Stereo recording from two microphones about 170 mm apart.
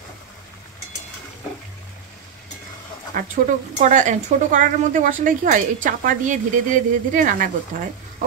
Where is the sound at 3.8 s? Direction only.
45° right (ahead or behind).